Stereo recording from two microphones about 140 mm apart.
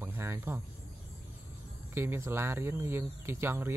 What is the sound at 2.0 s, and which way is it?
Speech, 20° right (ahead or behind).